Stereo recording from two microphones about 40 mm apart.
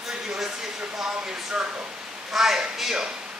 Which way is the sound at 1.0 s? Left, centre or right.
Centre.